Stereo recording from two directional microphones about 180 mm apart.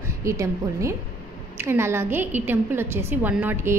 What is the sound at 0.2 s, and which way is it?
A woman's voice, 15° right (ahead or behind).